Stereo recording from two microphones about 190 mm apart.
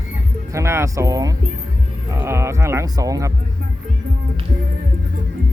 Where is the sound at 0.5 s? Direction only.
15° right (ahead or behind).